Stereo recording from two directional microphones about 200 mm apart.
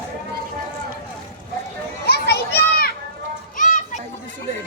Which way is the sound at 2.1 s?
55° left (ahead or behind).